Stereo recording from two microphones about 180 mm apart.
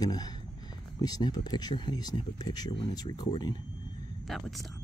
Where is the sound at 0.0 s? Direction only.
20° left (ahead or behind).